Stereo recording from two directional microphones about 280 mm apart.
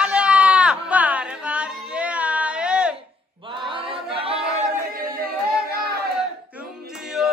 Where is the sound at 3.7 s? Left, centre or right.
Centre.